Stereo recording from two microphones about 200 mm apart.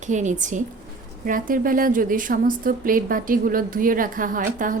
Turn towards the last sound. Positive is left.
turn(degrees=-40)  # may be behind; listen again after turning